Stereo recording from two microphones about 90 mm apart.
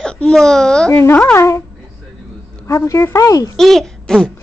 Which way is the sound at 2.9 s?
35° left (ahead or behind).